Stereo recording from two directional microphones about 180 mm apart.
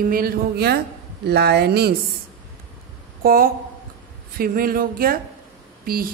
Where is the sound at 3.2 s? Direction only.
55° right (ahead or behind).